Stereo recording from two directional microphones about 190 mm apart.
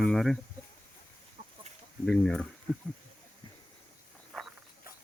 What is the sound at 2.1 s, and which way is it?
Speech, 5° left (ahead or behind).